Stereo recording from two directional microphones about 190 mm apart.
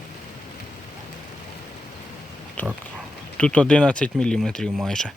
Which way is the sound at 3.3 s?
5° left (ahead or behind).